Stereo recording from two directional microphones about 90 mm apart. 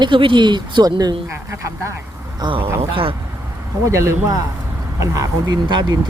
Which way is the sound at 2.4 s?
75° right (ahead or behind).